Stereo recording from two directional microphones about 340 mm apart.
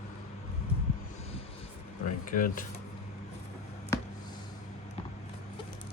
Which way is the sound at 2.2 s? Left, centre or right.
Left.